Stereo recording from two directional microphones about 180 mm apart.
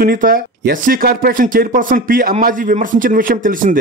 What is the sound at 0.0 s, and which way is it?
Speech, 50° right (ahead or behind).